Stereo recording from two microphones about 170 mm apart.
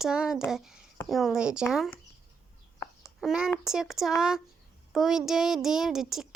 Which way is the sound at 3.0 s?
Centre (ahead or behind).